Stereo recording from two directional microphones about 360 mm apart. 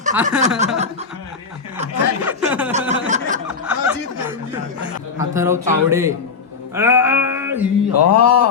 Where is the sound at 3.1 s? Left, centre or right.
Right.